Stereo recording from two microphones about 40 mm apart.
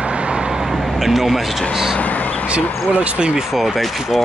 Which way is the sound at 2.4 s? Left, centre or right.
Right.